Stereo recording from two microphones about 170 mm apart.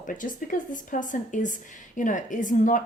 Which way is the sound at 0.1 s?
50° left (ahead or behind).